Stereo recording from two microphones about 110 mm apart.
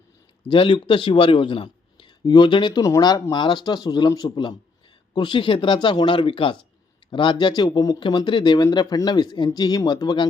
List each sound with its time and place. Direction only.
0.4 s speech: 50° left (ahead or behind)